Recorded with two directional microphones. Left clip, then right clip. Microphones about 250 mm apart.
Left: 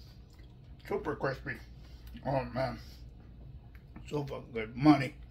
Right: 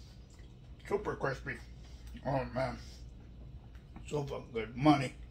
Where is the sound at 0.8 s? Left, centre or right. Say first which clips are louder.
Left 1 dB; centre.